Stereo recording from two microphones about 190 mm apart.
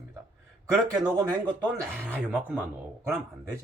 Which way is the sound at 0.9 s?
20° right (ahead or behind).